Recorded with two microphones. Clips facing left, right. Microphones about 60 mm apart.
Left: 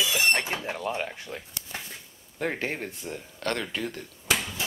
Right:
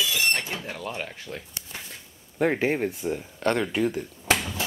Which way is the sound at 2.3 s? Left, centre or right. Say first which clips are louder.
Right 7 dB; centre.